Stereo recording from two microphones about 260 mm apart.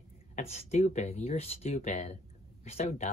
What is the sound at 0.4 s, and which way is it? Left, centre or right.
Speech, left.